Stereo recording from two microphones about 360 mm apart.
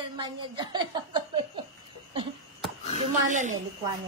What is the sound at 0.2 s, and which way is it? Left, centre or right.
Speech, centre.